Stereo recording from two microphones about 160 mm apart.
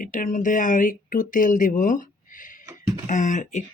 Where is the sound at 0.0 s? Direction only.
55° left (ahead or behind).